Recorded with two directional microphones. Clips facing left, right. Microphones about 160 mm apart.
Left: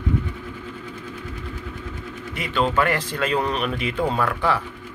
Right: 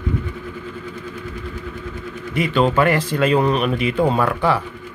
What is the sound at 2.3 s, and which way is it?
Speech, 10° right (ahead or behind).